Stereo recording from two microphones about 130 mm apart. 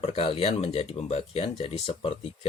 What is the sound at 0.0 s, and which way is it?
Speech, 45° left (ahead or behind).